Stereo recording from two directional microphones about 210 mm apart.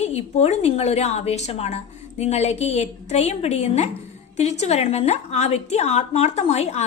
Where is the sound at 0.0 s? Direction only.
30° left (ahead or behind).